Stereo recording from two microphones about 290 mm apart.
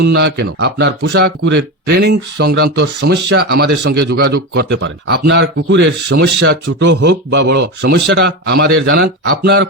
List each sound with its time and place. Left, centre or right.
0.0 s speech: right